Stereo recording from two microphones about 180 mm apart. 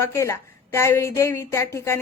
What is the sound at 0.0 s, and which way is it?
A woman's voice, 15° left (ahead or behind).